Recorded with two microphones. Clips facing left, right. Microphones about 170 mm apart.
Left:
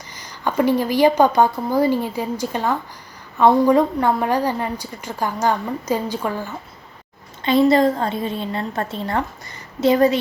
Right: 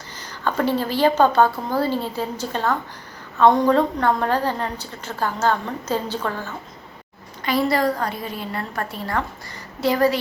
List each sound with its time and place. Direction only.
0.2 s a woman's voice: 15° left (ahead or behind)
7.4 s a woman's voice: 25° left (ahead or behind)